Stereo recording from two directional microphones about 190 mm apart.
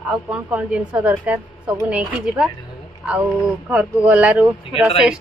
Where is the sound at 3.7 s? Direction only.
5° right (ahead or behind).